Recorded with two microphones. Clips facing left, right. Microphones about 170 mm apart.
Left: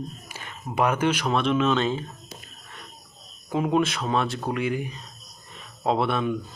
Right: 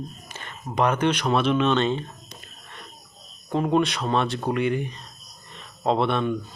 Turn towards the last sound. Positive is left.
turn(degrees=5)  # may be behind; listen again after turning